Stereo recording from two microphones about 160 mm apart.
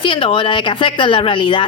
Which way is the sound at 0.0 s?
30° left (ahead or behind).